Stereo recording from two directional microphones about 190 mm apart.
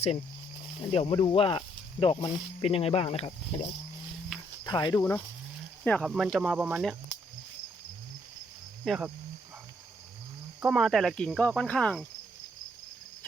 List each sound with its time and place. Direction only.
0.9 s speech: 30° left (ahead or behind)
4.6 s speech: 20° left (ahead or behind); by 6.1 s 5° left (ahead or behind)
6.1 s cricket: centre (ahead or behind)
8.8 s speech: centre (ahead or behind)
10.6 s cricket: 5° right (ahead or behind)